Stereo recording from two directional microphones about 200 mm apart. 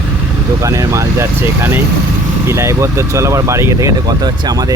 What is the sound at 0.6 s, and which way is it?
Speech, 15° right (ahead or behind).